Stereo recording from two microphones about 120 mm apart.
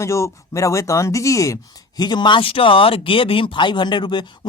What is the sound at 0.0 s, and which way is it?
Speech, 25° left (ahead or behind).